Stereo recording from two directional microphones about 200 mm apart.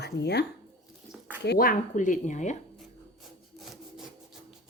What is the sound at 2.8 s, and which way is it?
Wood, centre (ahead or behind).